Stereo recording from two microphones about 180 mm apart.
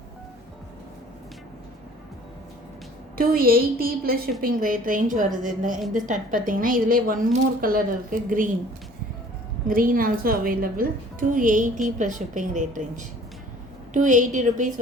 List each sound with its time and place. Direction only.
3.2 s a woman's voice: 55° right (ahead or behind)
9.6 s a woman's voice: 50° right (ahead or behind)